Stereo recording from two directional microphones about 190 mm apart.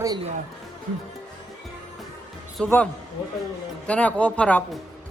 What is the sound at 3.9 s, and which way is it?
Speech, 5° left (ahead or behind).